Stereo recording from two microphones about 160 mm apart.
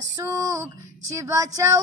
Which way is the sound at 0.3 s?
20° right (ahead or behind).